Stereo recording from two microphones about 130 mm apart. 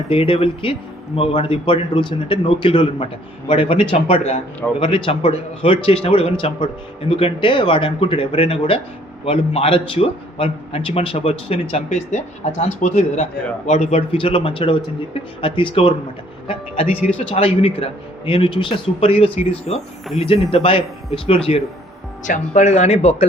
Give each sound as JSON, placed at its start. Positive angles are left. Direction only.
{"t": 0.1, "sound": "a man's voice", "side_deg": 45}
{"t": 4.8, "sound": "a man's voice", "side_deg": 40}
{"t": 12.8, "sound": "a man's voice", "side_deg": 65}
{"t": 22.3, "sound": "speech", "side_deg": 60}